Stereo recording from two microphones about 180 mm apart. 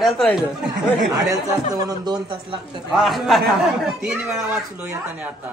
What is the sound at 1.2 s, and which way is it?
Speech, 20° right (ahead or behind).